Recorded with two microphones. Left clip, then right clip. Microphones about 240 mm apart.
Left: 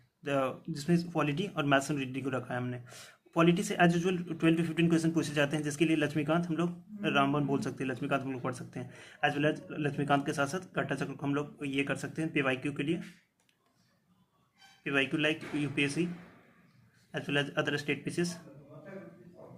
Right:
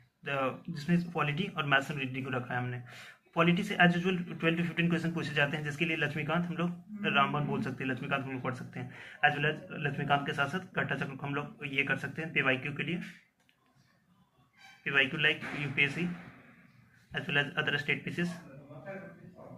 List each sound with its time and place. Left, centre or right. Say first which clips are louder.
0.3 s a man's voice: left 1 dB; left
14.8 s a man's voice: right 2 dB; left
17.1 s a man's voice: right 1 dB; left